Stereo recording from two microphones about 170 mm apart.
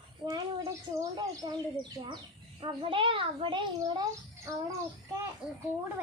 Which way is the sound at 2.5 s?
30° right (ahead or behind).